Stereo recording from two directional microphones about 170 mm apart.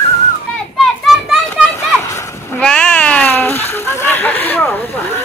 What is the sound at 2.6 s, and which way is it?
Speech, 5° left (ahead or behind).